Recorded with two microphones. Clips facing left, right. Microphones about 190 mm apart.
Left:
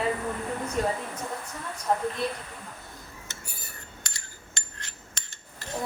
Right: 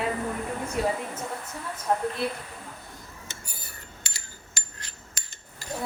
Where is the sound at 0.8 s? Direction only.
5° right (ahead or behind).